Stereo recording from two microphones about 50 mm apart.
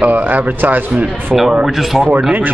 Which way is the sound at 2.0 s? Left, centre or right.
Right.